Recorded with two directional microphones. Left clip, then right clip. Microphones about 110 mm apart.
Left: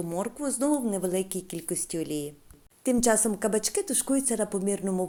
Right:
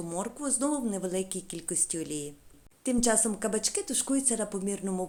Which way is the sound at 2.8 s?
40° left (ahead or behind).